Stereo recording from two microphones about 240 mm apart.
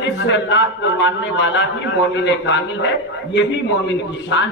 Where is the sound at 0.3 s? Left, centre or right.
Left.